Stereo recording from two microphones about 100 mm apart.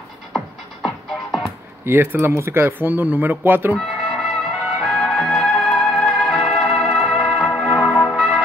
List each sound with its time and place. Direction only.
0.8 s music: centre (ahead or behind)
1.9 s speech: 25° right (ahead or behind)
3.7 s music: 5° left (ahead or behind)